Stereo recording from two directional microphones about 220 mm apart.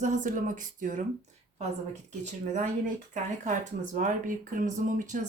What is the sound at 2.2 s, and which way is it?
Speech, 35° right (ahead or behind).